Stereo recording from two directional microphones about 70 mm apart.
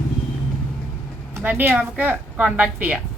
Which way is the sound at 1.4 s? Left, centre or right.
Right.